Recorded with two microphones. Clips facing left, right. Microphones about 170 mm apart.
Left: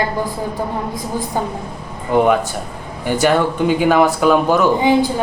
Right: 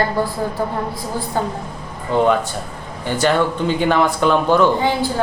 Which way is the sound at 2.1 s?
15° left (ahead or behind).